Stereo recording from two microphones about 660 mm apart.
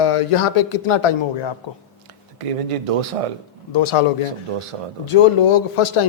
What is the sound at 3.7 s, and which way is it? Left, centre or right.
Speech, left.